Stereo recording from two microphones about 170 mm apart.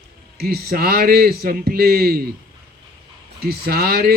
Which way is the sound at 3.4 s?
65° right (ahead or behind).